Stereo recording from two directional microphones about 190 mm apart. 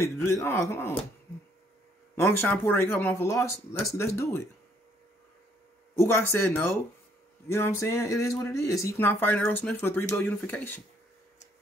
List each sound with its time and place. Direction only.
0.0 s speech: 15° left (ahead or behind)
2.2 s speech: 10° left (ahead or behind)
5.9 s speech: 15° left (ahead or behind)